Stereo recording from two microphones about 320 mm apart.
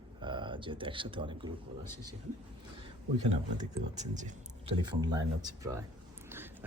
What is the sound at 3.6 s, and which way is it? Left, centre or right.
Speech, right.